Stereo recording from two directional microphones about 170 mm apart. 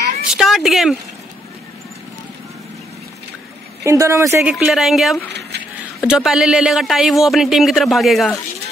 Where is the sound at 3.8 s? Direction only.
15° right (ahead or behind).